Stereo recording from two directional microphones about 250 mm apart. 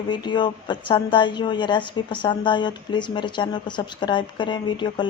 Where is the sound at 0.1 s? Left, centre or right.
Centre.